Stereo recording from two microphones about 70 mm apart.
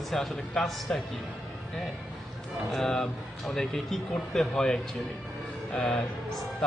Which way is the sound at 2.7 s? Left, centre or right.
Centre.